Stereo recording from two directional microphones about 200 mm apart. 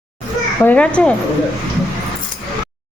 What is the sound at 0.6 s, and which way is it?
Speech, 5° left (ahead or behind).